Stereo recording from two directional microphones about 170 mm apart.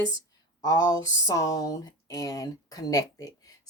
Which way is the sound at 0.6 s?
20° left (ahead or behind).